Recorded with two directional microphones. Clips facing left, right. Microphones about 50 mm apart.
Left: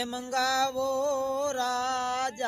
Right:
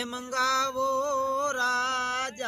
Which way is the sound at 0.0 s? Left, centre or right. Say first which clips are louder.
Right 1 dB; right.